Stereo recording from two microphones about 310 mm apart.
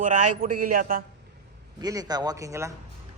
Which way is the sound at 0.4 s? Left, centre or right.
Right.